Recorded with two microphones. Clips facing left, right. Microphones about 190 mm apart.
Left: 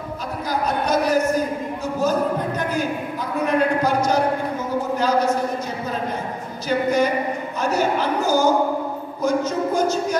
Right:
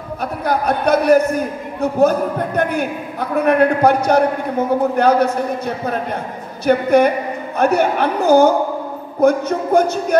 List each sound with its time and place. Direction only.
0.2 s a man's voice: 60° right (ahead or behind)
6.6 s a man's voice: 60° right (ahead or behind)